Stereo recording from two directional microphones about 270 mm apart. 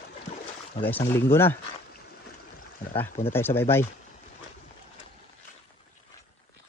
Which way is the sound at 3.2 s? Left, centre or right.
Centre.